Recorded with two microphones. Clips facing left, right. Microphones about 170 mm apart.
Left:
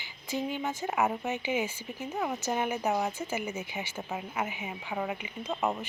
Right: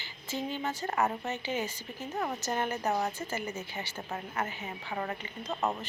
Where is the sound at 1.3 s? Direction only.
15° left (ahead or behind).